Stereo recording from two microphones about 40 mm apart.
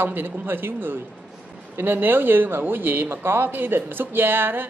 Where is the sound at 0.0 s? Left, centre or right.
Right.